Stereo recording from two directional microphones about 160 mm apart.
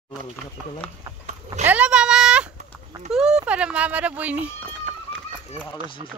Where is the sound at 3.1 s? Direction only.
5° right (ahead or behind).